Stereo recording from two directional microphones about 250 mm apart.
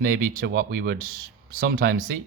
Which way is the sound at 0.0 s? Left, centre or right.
Right.